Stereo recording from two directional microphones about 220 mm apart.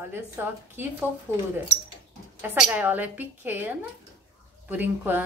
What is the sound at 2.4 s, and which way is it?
Speech, 10° right (ahead or behind).